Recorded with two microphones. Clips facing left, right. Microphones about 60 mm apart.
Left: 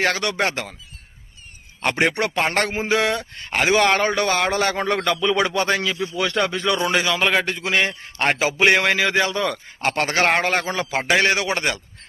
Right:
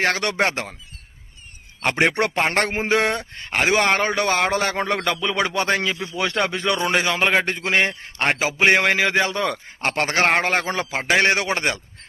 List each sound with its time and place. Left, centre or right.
0.2 s a man's voice: right
2.0 s a man's voice: right
3.8 s a man's voice: centre
8.2 s a man's voice: centre
8.5 s a man's voice: right
10.9 s a man's voice: centre
11.3 s a man's voice: right